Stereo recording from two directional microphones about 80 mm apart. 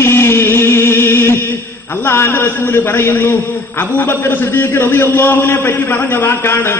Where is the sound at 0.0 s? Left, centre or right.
Left.